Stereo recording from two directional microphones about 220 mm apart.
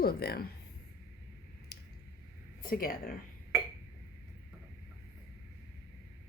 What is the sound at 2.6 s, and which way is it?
Speech, 40° left (ahead or behind).